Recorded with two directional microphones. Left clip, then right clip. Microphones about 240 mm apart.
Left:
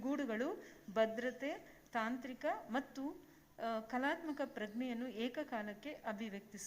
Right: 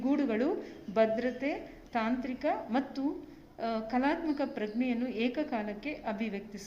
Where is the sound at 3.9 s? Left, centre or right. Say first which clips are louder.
Right 9 dB; left.